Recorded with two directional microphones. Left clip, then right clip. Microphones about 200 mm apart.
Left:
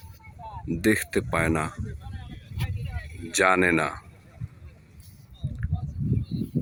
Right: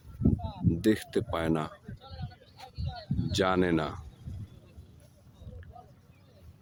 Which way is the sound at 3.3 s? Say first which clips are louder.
Left 7 dB; 10° left (ahead or behind).